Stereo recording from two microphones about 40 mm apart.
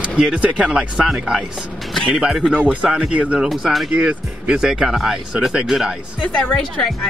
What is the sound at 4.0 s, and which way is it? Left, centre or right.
Speech, right.